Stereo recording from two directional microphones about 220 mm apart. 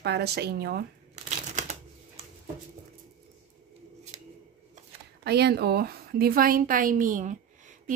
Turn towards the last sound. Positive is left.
turn(degrees=-35)  # may be behind; listen again after turning